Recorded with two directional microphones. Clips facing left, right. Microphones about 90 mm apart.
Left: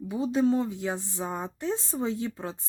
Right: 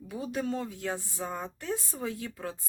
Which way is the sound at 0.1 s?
20° left (ahead or behind).